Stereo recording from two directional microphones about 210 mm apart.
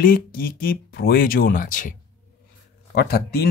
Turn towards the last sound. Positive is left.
turn(degrees=50)  # may be behind; listen again after turning